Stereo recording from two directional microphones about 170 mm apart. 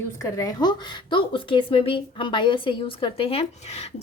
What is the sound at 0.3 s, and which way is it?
Speech, 20° left (ahead or behind).